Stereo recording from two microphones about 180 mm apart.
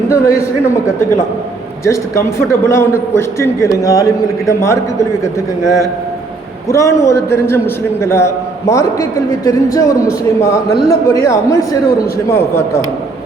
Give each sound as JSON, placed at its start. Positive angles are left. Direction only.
{"t": 0.1, "sound": "a man's voice", "side_deg": 15}
{"t": 6.7, "sound": "a man's voice", "side_deg": 15}